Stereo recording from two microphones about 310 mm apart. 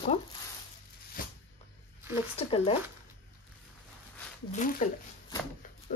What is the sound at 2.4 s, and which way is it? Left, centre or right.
Speech, centre.